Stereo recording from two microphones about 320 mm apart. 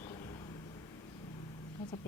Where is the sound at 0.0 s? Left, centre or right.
Centre.